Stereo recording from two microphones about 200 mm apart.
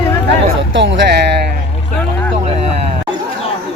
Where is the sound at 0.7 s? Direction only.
65° right (ahead or behind).